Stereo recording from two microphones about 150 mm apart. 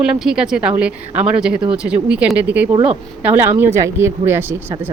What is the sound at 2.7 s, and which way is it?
Speech, 30° right (ahead or behind).